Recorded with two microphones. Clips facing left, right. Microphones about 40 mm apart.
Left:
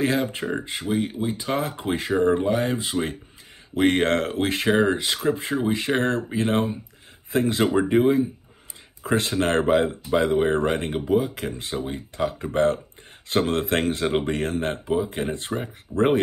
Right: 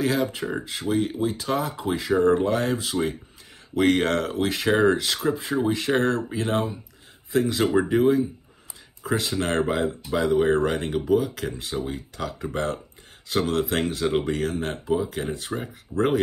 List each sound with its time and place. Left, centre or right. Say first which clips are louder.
0.0 s speech: left 1 dB; left
0.8 s speech: right 2 dB; centre
1.6 s speech: left 1 dB; left
2.1 s speech: right 1 dB; centre
2.8 s speech: even; left
4.6 s speech: right 1 dB; centre
5.2 s speech: left 1 dB; left
5.6 s speech: right 1 dB; centre
6.3 s speech: left 2 dB; left
9.0 s speech: left 3 dB; left
15.2 s speech: left 2 dB; centre